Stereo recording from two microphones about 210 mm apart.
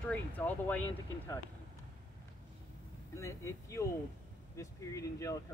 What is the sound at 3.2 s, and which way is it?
Speech, 15° left (ahead or behind).